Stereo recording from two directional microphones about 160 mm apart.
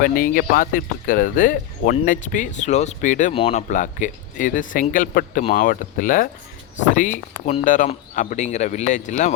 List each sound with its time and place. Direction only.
0.0 s speech: 60° left (ahead or behind)